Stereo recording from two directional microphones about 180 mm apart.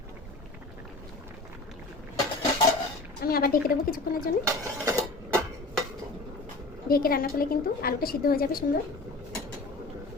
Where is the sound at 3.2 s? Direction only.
55° left (ahead or behind).